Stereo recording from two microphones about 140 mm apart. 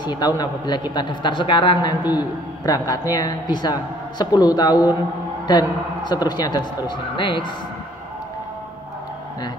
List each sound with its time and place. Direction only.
0.0 s a man's voice: 30° left (ahead or behind)